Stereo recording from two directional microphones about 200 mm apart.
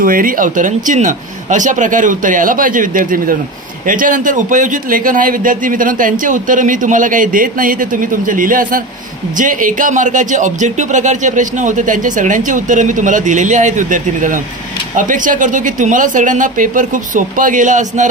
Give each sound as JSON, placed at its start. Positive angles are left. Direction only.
{"t": 0.0, "sound": "a man's voice", "side_deg": -45}